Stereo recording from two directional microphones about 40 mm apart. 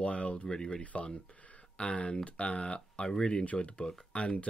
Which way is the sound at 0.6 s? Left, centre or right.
Centre.